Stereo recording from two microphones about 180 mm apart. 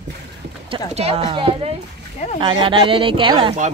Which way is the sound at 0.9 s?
35° right (ahead or behind).